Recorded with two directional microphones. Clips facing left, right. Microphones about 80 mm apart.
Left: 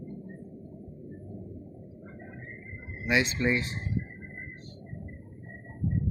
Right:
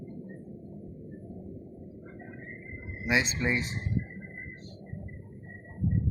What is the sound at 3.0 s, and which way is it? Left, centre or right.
Speech, right.